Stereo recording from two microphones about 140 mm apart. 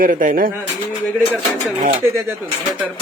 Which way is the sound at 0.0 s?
75° right (ahead or behind).